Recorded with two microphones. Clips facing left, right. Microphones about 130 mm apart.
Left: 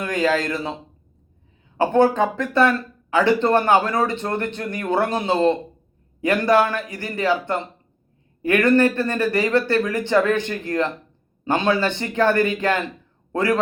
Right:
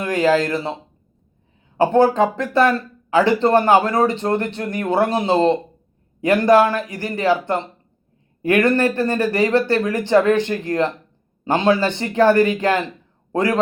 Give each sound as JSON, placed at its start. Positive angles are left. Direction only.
{"t": 0.0, "sound": "speech", "side_deg": -25}
{"t": 1.8, "sound": "speech", "side_deg": -20}